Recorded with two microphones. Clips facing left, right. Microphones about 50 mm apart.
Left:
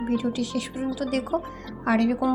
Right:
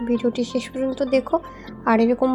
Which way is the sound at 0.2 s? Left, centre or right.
Right.